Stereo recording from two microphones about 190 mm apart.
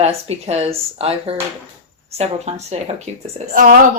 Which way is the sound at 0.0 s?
35° right (ahead or behind).